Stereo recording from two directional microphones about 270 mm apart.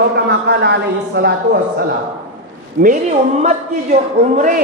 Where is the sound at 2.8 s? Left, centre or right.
Right.